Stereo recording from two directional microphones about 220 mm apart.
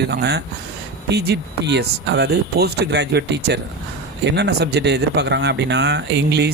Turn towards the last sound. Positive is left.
turn(degrees=-50)  # may be behind; listen again after turning